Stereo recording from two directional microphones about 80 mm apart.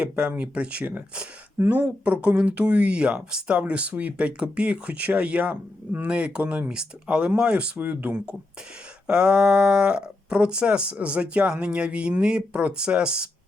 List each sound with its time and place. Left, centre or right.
0.0 s speech: centre
1.5 s speech: right; by 13.3 s centre